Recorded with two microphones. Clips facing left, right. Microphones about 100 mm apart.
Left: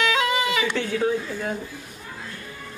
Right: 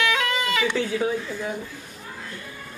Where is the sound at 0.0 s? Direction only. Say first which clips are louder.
Left 2 dB; 20° left (ahead or behind).